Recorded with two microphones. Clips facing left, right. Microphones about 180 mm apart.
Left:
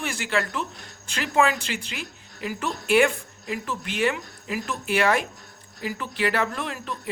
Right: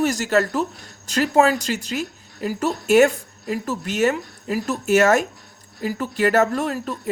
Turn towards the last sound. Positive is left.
turn(degrees=-40)  # may be behind; listen again after turning